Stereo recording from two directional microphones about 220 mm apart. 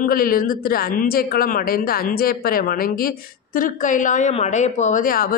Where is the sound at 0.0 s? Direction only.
40° left (ahead or behind).